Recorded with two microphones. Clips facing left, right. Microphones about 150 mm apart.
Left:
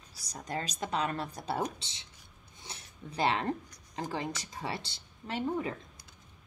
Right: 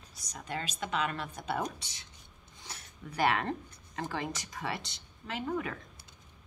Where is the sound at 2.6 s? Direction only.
25° left (ahead or behind).